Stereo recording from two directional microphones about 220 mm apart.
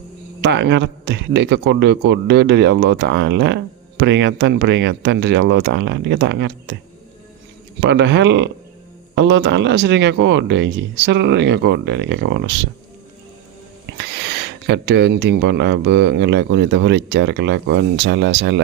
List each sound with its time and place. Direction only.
0.4 s speech: 50° right (ahead or behind)
7.8 s speech: 50° right (ahead or behind)
14.0 s speech: 50° right (ahead or behind)